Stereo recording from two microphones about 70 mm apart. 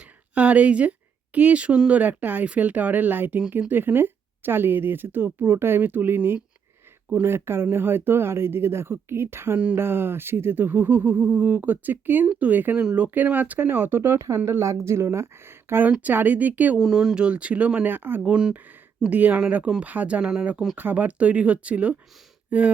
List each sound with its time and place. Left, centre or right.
0.3 s speech: centre
12.8 s speech: centre
13.1 s speech: right
14.2 s speech: right
15.9 s speech: right
16.8 s speech: centre; by 18.2 s right
18.2 s speech: centre
22.4 s a sound: right